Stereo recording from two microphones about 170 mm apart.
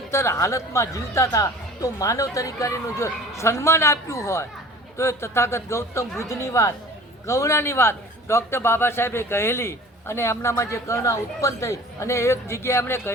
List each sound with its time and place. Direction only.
0.1 s a man's voice: 15° left (ahead or behind)